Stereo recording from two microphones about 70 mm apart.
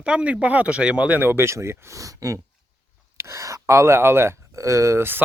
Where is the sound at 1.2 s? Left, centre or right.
Right.